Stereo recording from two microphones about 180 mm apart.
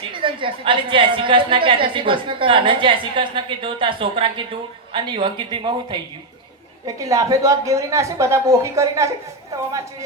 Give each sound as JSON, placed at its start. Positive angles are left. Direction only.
{"t": 0.1, "sound": "a woman's voice", "side_deg": -30}